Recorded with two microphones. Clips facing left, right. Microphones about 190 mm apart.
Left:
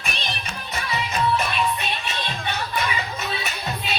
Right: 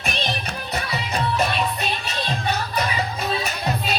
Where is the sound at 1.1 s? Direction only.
40° right (ahead or behind).